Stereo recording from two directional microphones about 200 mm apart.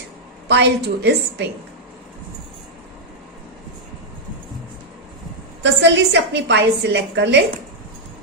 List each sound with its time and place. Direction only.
0.4 s a woman's voice: 60° right (ahead or behind)
5.6 s a woman's voice: 60° right (ahead or behind)